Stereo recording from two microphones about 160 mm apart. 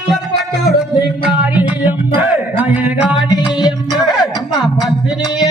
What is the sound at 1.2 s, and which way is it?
Music, 10° right (ahead or behind).